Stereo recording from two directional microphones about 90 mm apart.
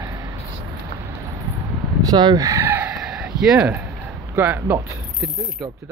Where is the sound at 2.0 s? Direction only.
50° right (ahead or behind).